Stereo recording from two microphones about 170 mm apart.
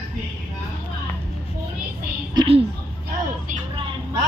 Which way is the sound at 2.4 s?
35° right (ahead or behind).